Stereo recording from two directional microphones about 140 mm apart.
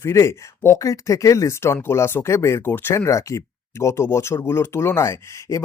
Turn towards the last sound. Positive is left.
turn(degrees=20)  # may be behind; listen again after turning